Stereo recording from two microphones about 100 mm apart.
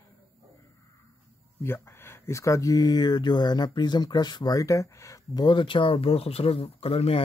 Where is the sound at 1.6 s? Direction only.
25° left (ahead or behind).